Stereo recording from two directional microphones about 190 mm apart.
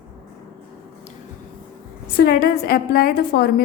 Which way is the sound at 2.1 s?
50° left (ahead or behind).